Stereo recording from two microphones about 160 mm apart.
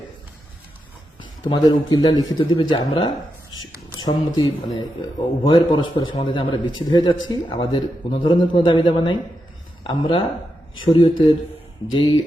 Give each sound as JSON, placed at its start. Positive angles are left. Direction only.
{"t": 1.2, "sound": "speech", "side_deg": 25}